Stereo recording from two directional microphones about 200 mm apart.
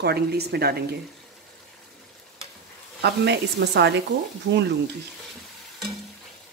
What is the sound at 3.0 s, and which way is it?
Speech, 55° right (ahead or behind).